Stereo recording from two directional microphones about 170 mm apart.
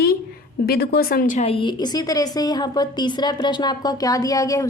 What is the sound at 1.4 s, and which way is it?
A woman's voice, 30° left (ahead or behind).